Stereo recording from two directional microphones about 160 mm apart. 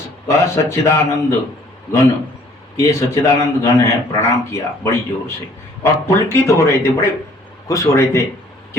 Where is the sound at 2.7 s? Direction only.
20° left (ahead or behind).